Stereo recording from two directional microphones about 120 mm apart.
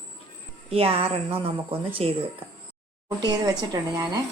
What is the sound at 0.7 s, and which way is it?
A woman's voice, 55° right (ahead or behind).